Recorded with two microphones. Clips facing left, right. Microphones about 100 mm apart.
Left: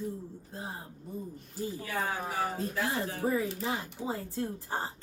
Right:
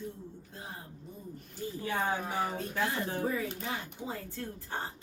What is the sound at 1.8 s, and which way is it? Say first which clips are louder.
Speech: right 4 dB; 25° right (ahead or behind).